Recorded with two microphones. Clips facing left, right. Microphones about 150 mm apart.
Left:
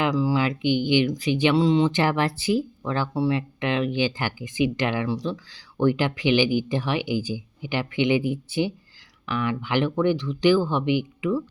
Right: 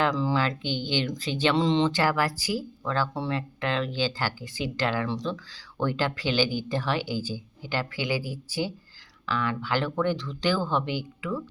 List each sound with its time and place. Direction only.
0.0 s speech: 5° left (ahead or behind)
1.9 s speech: 20° left (ahead or behind)